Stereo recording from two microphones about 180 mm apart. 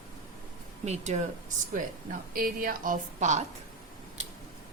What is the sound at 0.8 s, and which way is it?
Speech, 40° right (ahead or behind).